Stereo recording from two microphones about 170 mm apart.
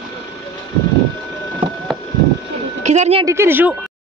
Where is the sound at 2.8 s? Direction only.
40° right (ahead or behind).